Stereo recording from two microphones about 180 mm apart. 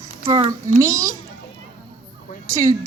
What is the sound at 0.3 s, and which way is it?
Speech, 25° right (ahead or behind).